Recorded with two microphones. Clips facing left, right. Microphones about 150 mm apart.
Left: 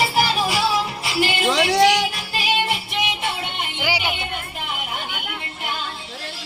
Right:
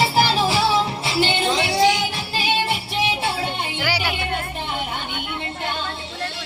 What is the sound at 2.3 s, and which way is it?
Music, 30° right (ahead or behind).